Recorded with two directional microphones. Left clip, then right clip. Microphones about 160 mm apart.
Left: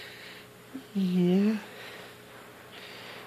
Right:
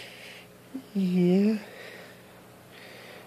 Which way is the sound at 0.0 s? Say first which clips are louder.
Even; 55° right (ahead or behind).